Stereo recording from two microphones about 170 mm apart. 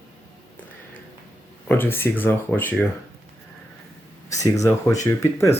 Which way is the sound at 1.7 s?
10° left (ahead or behind).